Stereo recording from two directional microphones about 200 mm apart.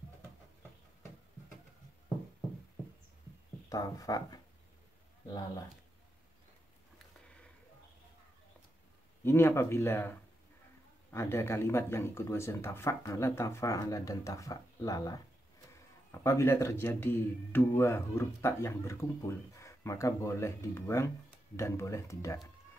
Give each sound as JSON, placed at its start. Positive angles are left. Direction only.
{"t": 3.6, "sound": "speech", "side_deg": 15}
{"t": 9.2, "sound": "speech", "side_deg": 10}